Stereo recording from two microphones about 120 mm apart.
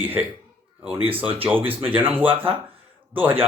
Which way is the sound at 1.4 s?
15° right (ahead or behind).